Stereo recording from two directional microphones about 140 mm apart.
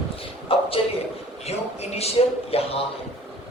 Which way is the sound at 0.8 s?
40° left (ahead or behind).